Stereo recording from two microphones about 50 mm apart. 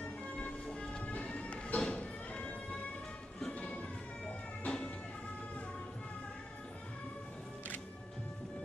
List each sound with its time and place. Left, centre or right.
0.0 s music: left
3.5 s a sound: left
4.6 s music: left